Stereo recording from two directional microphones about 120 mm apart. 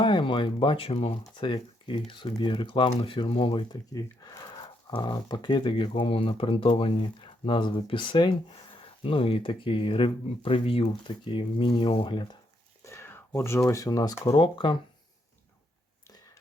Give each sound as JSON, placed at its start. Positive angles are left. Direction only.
{"t": 0.0, "sound": "speech", "side_deg": 45}
{"t": 3.9, "sound": "speech", "side_deg": 30}
{"t": 12.8, "sound": "a sound", "side_deg": 20}
{"t": 14.3, "sound": "speech", "side_deg": 40}